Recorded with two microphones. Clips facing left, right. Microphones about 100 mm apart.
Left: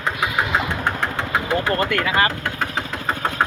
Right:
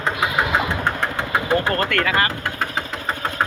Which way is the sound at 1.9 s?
20° left (ahead or behind).